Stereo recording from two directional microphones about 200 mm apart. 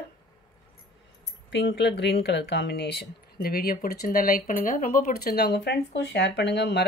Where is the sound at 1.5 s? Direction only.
60° left (ahead or behind).